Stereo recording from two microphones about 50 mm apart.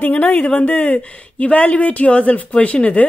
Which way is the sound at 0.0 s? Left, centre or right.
Left.